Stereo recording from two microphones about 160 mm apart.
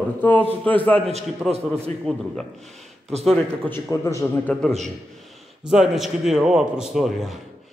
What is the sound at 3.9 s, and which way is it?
Speech, 20° left (ahead or behind).